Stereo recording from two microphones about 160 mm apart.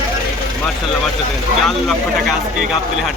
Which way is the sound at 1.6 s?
Centre (ahead or behind).